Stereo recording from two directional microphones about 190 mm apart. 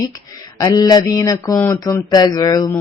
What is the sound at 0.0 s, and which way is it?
Speech, 20° left (ahead or behind).